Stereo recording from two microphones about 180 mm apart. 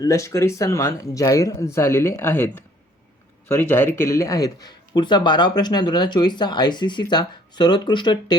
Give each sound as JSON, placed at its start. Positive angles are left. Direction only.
{"t": 0.0, "sound": "speech", "side_deg": 15}